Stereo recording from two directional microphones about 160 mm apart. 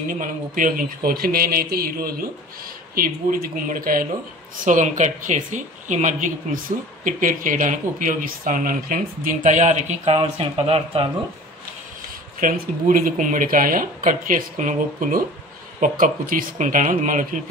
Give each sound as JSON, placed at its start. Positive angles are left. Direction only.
{"t": 0.1, "sound": "speech", "side_deg": -60}
{"t": 4.6, "sound": "speech", "side_deg": -50}
{"t": 12.4, "sound": "speech", "side_deg": -60}